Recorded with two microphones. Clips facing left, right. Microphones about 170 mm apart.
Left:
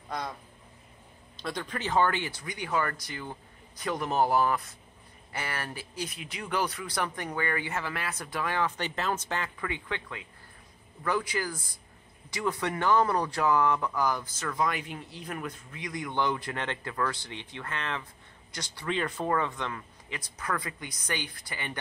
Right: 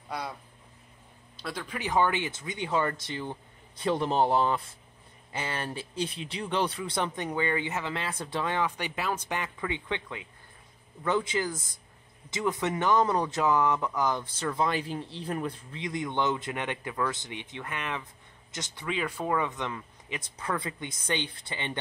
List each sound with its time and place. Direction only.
0.1 s a man's voice: 10° right (ahead or behind)
1.8 s speech: 15° right (ahead or behind)
18.9 s speech: 5° right (ahead or behind); by 21.7 s 25° right (ahead or behind)